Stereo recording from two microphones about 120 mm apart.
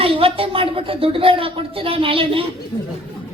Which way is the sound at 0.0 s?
50° right (ahead or behind).